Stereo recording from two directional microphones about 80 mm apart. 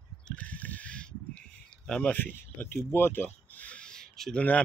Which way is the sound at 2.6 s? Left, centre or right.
Left.